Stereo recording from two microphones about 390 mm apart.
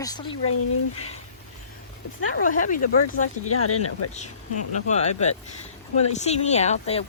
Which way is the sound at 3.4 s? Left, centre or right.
Left.